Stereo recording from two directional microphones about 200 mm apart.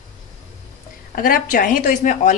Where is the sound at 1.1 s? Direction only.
45° left (ahead or behind).